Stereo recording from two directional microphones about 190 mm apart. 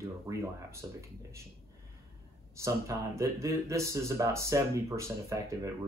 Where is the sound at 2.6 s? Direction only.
15° right (ahead or behind).